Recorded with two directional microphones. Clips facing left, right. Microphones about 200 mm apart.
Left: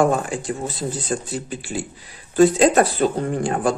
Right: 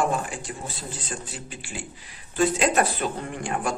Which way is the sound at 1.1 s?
40° left (ahead or behind).